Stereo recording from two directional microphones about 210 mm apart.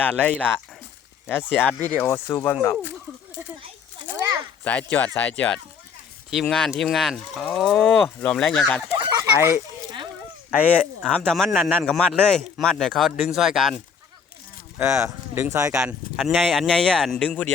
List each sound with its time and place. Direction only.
0.0 s speech: 5° left (ahead or behind)
3.4 s a sound: 10° right (ahead or behind)
4.6 s speech: 5° left (ahead or behind)
9.1 s a sound: 15° right (ahead or behind)
10.5 s speech: 5° right (ahead or behind)
11.1 s speech: 5° left (ahead or behind)
14.8 s speech: 15° right (ahead or behind)
16.1 s speech: centre (ahead or behind)